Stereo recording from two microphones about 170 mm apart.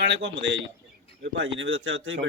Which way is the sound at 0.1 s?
90° right.